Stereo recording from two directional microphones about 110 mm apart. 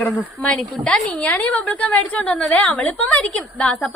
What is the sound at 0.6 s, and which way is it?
A woman's voice, 5° left (ahead or behind).